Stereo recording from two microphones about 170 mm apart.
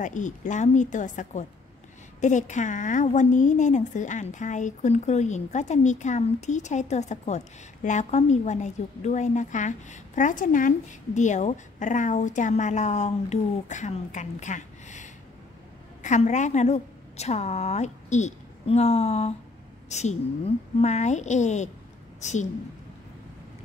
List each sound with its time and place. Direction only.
0.0 s a woman's voice: 45° left (ahead or behind)